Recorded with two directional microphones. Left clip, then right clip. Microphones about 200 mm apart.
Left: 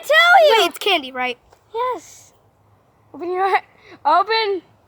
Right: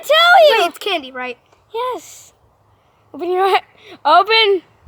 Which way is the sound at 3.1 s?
35° right (ahead or behind).